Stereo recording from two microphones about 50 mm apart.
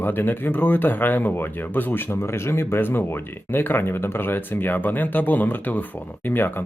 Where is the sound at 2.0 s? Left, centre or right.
Left.